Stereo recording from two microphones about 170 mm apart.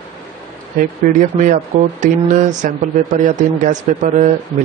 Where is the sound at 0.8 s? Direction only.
50° right (ahead or behind).